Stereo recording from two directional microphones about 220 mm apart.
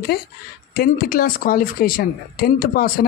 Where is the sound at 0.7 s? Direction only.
40° left (ahead or behind).